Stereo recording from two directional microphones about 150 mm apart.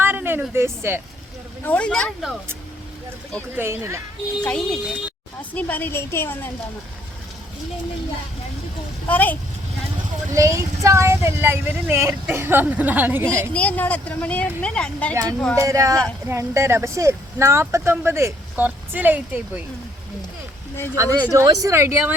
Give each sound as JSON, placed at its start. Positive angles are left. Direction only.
{"t": 0.0, "sound": "speech", "side_deg": -15}
{"t": 1.6, "sound": "speech", "side_deg": 10}
{"t": 3.5, "sound": "speech", "side_deg": -15}
{"t": 4.4, "sound": "speech", "side_deg": 5}
{"t": 9.0, "sound": "speech", "side_deg": 10}
{"t": 10.3, "sound": "speech", "side_deg": -20}
{"t": 13.5, "sound": "speech", "side_deg": 10}
{"t": 15.1, "sound": "speech", "side_deg": -25}
{"t": 20.7, "sound": "speech", "side_deg": 15}
{"t": 21.0, "sound": "speech", "side_deg": -25}